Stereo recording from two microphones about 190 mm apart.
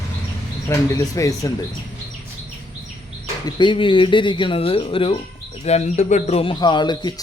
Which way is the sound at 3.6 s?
25° left (ahead or behind).